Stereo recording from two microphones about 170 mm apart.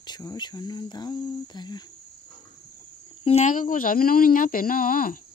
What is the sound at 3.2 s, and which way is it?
Speech, 40° left (ahead or behind).